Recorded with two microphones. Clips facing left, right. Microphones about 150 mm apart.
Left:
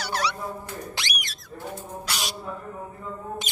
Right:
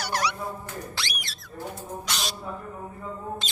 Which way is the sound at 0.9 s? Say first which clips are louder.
Left 1 dB; 15° left (ahead or behind).